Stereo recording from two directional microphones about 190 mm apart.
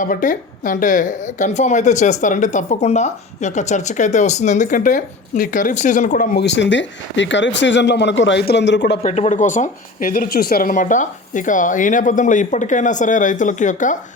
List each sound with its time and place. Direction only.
0.0 s a woman's voice: 45° left (ahead or behind)
6.3 s speech: 65° left (ahead or behind)
9.0 s a woman's voice: 40° left (ahead or behind)